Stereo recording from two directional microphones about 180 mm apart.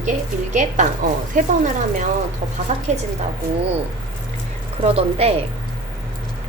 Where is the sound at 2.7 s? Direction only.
40° right (ahead or behind).